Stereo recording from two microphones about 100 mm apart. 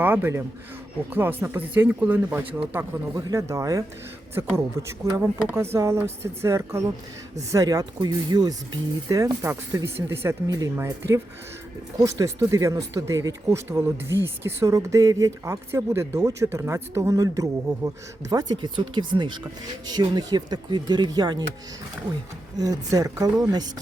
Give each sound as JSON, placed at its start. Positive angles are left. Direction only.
{"t": 0.0, "sound": "a man's voice", "side_deg": -20}
{"t": 22.5, "sound": "speech", "side_deg": -35}